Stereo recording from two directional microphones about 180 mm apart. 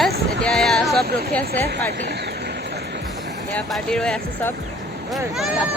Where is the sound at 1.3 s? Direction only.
10° left (ahead or behind).